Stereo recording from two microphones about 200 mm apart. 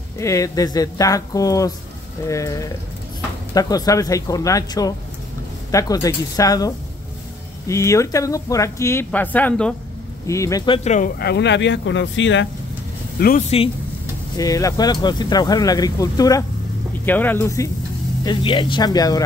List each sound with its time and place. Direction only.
0.2 s speech: 15° left (ahead or behind)
10.9 s speech: 45° left (ahead or behind); by 12.4 s 65° left (ahead or behind)
13.5 s speech: 30° left (ahead or behind)
14.3 s speech: 20° left (ahead or behind)